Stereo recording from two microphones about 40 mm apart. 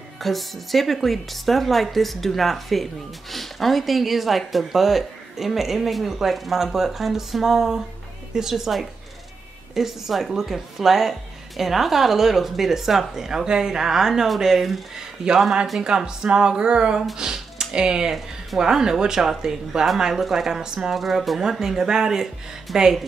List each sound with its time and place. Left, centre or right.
0.2 s a woman's voice: centre; by 17.0 s right
17.2 s music: centre
18.6 s a woman's voice: centre
21.4 s speech: centre
22.7 s a woman's voice: centre